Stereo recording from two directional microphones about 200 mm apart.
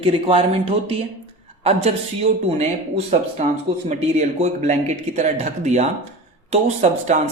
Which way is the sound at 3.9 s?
35° right (ahead or behind).